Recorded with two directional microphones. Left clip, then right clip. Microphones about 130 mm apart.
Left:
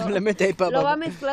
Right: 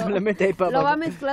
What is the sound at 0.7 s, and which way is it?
Speech, 35° right (ahead or behind).